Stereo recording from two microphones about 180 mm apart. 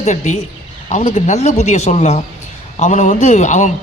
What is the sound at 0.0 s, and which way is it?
A man's voice, 40° left (ahead or behind).